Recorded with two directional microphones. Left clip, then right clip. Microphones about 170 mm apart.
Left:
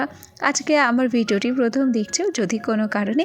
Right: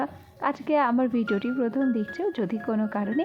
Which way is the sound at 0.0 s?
20° left (ahead or behind).